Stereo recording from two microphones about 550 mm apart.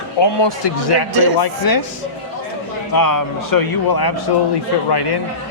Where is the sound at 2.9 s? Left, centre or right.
Left.